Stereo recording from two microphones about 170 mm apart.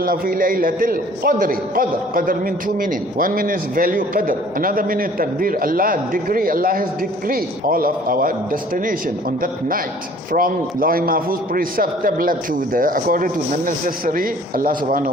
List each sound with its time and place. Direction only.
0.0 s a man's voice: 55° right (ahead or behind)